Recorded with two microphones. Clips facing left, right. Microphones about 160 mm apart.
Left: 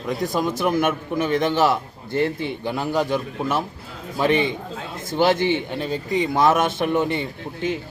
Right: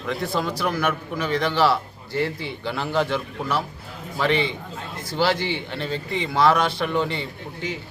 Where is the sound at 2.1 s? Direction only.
55° left (ahead or behind).